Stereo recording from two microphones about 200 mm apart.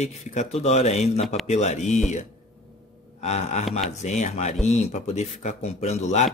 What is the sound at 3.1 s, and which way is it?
Speech, 35° left (ahead or behind).